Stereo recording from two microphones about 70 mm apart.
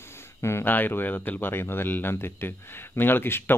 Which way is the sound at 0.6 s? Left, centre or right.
Left.